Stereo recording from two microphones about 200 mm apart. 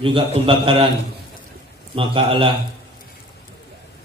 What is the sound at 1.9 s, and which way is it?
Speech, 25° right (ahead or behind).